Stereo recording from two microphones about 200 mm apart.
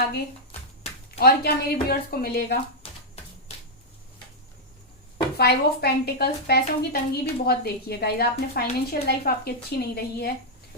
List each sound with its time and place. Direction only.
1.2 s a woman's voice: 50° left (ahead or behind)
5.4 s a woman's voice: 50° left (ahead or behind)